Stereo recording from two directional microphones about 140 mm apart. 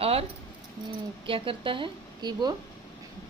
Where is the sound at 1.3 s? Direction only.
40° right (ahead or behind).